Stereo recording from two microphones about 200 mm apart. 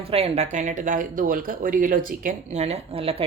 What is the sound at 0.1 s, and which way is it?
Speech, 30° right (ahead or behind).